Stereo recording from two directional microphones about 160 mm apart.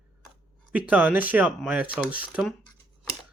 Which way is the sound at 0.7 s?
10° right (ahead or behind).